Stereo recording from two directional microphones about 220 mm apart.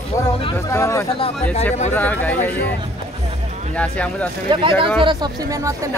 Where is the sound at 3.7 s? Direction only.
5° left (ahead or behind).